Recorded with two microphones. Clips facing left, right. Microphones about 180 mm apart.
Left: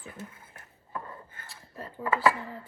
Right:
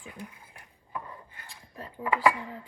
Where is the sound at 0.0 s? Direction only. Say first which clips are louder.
Even; 15° right (ahead or behind).